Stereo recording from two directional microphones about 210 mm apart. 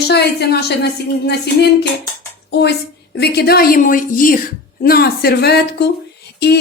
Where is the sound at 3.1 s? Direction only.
50° left (ahead or behind).